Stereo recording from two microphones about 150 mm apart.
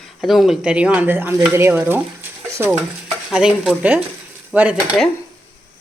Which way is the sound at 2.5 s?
15° right (ahead or behind).